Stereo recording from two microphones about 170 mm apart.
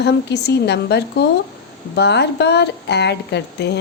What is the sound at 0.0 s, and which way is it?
A woman's voice, 80° left.